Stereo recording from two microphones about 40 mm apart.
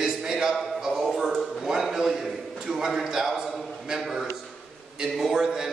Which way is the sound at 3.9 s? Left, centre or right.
Centre.